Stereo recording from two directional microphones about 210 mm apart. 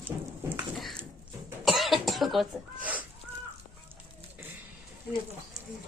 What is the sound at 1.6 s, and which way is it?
Cough, centre (ahead or behind).